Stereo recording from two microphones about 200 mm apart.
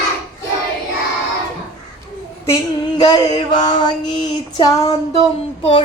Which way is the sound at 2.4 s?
20° left (ahead or behind).